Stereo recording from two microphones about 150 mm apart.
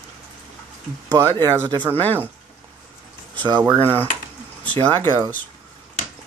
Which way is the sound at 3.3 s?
30° right (ahead or behind).